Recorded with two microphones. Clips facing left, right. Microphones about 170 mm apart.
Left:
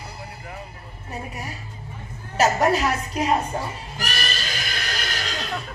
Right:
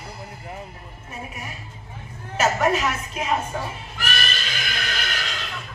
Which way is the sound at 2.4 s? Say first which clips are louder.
Left 2 dB; 35° left (ahead or behind).